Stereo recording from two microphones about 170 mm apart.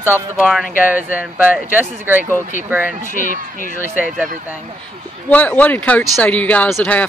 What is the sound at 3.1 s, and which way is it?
Speech, 50° left (ahead or behind).